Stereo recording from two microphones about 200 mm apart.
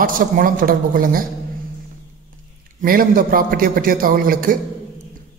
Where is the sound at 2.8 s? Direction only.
45° right (ahead or behind).